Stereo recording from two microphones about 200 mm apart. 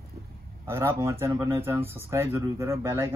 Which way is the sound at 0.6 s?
15° right (ahead or behind).